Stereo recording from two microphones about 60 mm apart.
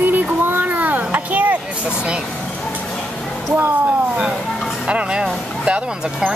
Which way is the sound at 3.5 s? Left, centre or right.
Right.